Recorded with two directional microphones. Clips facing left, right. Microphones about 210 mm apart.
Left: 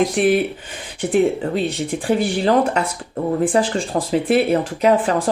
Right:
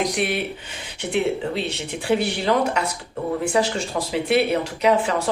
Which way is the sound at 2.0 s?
45° left (ahead or behind).